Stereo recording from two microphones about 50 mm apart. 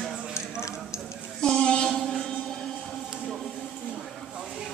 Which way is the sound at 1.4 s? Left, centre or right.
Centre.